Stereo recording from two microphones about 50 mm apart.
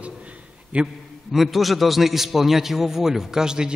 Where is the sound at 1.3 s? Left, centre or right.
Centre.